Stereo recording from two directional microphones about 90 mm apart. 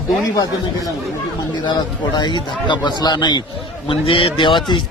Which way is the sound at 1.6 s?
55° left (ahead or behind).